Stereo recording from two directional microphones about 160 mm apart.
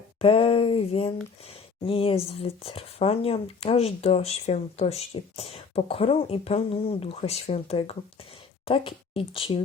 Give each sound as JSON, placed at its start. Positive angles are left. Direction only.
{"t": 0.2, "sound": "speech", "side_deg": 40}